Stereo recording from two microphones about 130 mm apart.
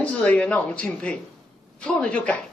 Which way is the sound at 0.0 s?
10° left (ahead or behind).